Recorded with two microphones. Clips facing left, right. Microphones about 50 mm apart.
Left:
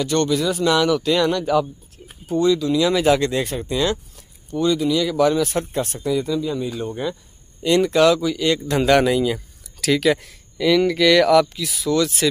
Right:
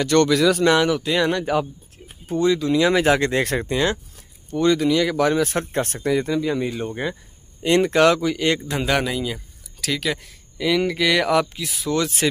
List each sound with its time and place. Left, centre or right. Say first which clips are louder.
0.0 s speech: right 3 dB; right
0.7 s speech: even; right
1.0 s speech: left 2 dB; right
1.3 s speech: left 2 dB; right
4.6 s speech: right 1 dB; right
6.9 s speech: left 1 dB; right
8.6 s speech: left 6 dB; centre
10.6 s speech: left 4 dB; centre; by 12.3 s right